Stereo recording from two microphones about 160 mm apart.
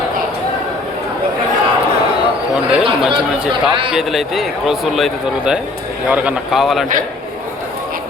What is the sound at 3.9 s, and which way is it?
A man's voice, centre (ahead or behind).